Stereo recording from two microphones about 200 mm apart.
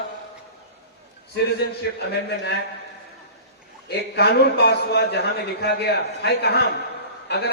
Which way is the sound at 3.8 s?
55° left (ahead or behind).